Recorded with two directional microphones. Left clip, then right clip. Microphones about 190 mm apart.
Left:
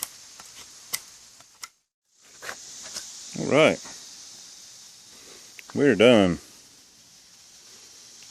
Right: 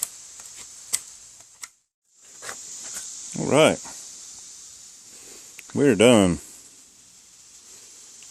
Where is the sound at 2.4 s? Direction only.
5° right (ahead or behind).